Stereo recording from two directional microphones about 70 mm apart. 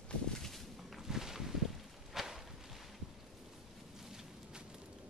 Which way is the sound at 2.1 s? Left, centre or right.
Centre.